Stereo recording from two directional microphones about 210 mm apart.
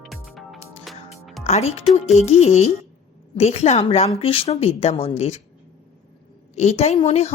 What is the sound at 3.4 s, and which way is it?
A woman's voice, 30° left (ahead or behind).